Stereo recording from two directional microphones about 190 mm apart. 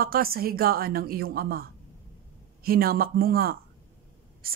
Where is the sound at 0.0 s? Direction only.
50° right (ahead or behind).